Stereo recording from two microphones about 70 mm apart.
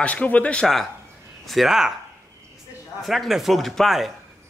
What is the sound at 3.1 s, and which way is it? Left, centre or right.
Speech, centre.